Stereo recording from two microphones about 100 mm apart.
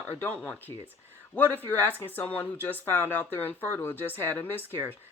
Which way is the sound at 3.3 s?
20° left (ahead or behind).